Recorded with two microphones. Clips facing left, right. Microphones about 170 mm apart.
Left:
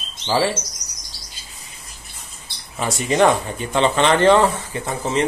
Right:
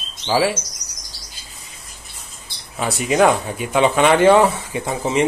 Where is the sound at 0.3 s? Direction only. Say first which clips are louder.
Right 1 dB; 10° right (ahead or behind).